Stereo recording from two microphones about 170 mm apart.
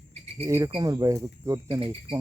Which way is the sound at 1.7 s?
30° right (ahead or behind).